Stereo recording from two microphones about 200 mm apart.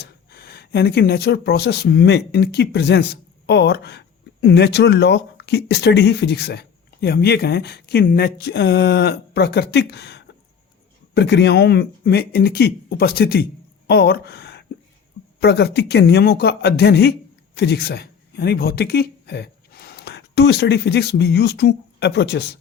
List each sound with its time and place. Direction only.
0.0 s speech: 50° left (ahead or behind)